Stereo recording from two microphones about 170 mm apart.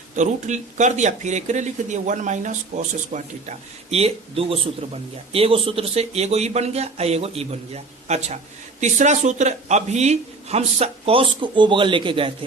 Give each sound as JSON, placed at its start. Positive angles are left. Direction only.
{"t": 0.2, "sound": "speech", "side_deg": -45}